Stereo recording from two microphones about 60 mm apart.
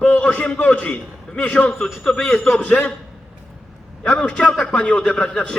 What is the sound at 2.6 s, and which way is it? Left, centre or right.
Speech, left.